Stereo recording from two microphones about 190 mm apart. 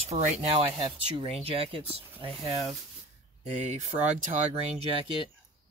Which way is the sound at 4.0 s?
40° right (ahead or behind).